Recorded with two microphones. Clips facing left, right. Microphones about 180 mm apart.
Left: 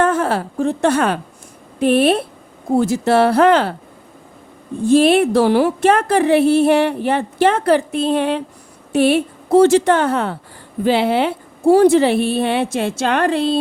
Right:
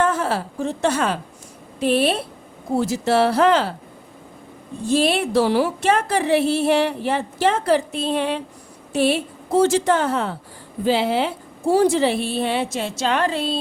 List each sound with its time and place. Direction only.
0.0 s a woman's voice: 55° left (ahead or behind)
4.9 s a woman's voice: 55° left (ahead or behind)